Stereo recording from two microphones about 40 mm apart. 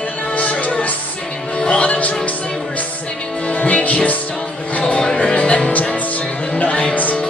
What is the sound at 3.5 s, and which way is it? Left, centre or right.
Music, left.